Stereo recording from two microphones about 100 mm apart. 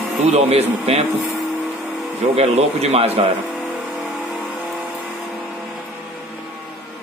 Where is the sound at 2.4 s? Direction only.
90° right.